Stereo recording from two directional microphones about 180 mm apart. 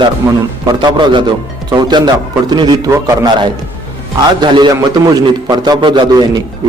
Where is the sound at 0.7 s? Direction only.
25° right (ahead or behind).